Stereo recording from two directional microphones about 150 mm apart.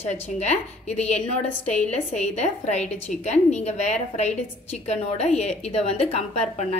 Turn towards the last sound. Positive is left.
turn(degrees=45)  # may be behind; listen again after turning